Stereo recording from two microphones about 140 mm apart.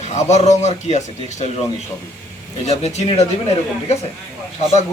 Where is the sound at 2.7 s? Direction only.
50° left (ahead or behind).